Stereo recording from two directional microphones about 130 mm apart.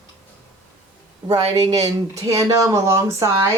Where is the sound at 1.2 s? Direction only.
30° right (ahead or behind).